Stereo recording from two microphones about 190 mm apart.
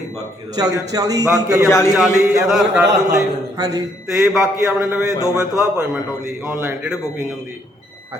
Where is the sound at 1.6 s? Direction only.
15° left (ahead or behind).